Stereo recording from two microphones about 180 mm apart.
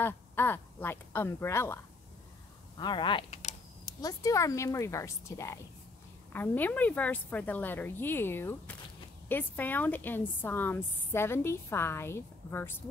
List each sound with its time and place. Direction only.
0.0 s speech: 10° left (ahead or behind)
2.8 s speech: 25° left (ahead or behind)
3.8 s a woman's voice: 20° left (ahead or behind)